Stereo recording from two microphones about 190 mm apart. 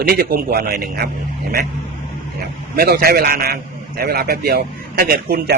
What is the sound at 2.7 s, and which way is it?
Speech, 50° right (ahead or behind).